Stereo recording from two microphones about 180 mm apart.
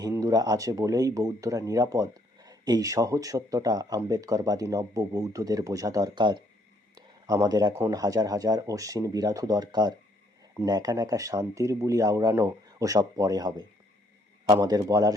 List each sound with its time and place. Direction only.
0.0 s speech: 15° right (ahead or behind)